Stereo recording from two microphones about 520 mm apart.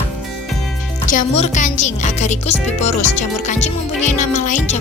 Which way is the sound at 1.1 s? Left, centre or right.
Centre.